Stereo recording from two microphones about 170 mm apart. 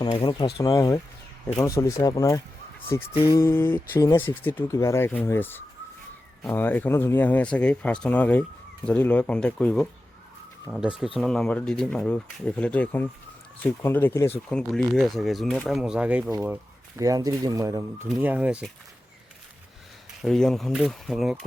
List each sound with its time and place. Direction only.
0.2 s speech: 25° left (ahead or behind); by 9.9 s 5° left (ahead or behind)
10.7 s speech: 5° right (ahead or behind)
17.0 s speech: 20° right (ahead or behind)
20.2 s speech: centre (ahead or behind)